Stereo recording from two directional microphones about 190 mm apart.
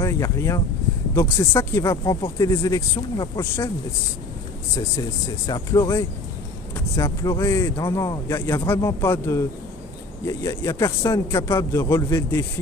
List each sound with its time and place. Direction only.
0.0 s speech: 15° left (ahead or behind)
5.5 s speech: 20° left (ahead or behind)